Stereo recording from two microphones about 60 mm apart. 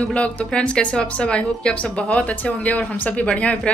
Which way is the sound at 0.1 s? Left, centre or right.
Centre.